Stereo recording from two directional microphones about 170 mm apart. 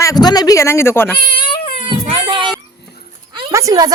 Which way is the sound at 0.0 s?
20° left (ahead or behind).